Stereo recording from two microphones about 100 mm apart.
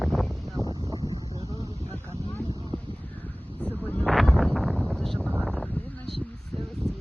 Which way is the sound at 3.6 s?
15° left (ahead or behind).